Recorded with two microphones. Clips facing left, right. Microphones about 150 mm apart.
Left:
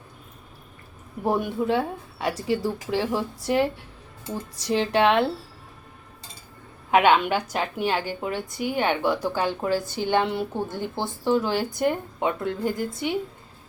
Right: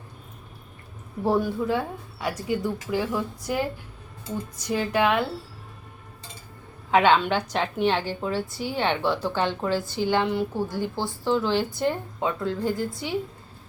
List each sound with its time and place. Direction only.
1.2 s speech: 15° left (ahead or behind)
4.6 s speech: 25° left (ahead or behind)
6.9 s a woman's voice: 15° left (ahead or behind)